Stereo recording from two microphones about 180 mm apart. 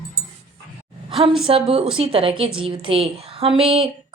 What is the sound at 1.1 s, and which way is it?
A woman's voice, 30° right (ahead or behind).